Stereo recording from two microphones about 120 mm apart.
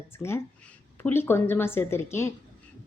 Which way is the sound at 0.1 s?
20° left (ahead or behind).